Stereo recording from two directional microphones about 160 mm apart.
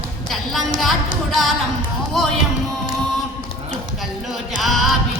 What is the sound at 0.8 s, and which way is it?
Music, centre (ahead or behind).